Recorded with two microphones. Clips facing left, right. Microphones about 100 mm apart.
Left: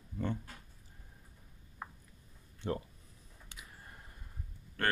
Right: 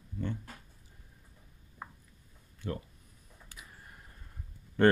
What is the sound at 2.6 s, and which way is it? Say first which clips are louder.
Speech: left 1 dB; 25° left (ahead or behind).